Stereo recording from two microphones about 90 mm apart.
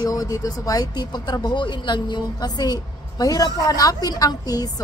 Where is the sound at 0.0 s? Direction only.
40° left (ahead or behind).